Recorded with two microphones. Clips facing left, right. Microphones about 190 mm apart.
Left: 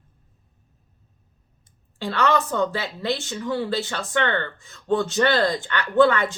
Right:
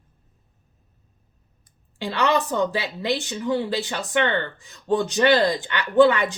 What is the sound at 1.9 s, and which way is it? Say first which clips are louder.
A woman's voice: even; 15° right (ahead or behind).